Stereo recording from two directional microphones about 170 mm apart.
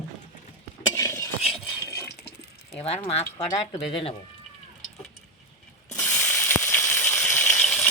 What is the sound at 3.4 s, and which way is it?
Speech, 20° left (ahead or behind).